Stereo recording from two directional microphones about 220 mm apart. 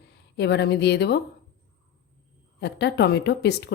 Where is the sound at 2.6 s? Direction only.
50° left (ahead or behind).